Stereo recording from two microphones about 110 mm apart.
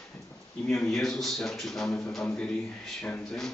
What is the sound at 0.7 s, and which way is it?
Speech, 5° left (ahead or behind).